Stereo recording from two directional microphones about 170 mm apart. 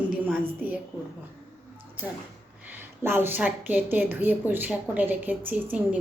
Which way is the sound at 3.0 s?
15° right (ahead or behind).